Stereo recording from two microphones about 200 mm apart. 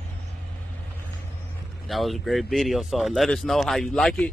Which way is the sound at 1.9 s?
Centre (ahead or behind).